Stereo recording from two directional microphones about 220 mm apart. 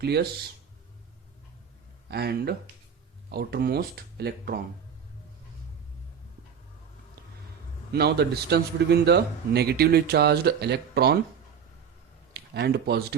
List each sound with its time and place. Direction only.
0.0 s a man's voice: 45° right (ahead or behind)
2.0 s a man's voice: 45° right (ahead or behind)
7.9 s a man's voice: 45° right (ahead or behind)
12.3 s speech: 50° right (ahead or behind)